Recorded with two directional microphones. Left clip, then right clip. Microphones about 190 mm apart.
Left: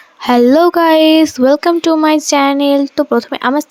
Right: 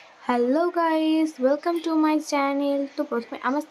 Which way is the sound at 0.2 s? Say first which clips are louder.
Left 13 dB; 50° left (ahead or behind).